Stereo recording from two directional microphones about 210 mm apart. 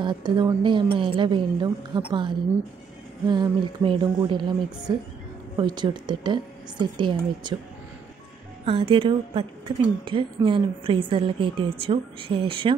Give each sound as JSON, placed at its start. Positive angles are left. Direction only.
{"t": 0.0, "sound": "speech", "side_deg": -20}
{"t": 8.6, "sound": "speech", "side_deg": -25}